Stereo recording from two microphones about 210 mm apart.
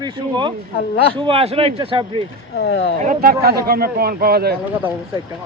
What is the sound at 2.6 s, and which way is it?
Speech, 55° left (ahead or behind).